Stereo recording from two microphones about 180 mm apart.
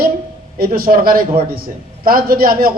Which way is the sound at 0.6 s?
55° right (ahead or behind).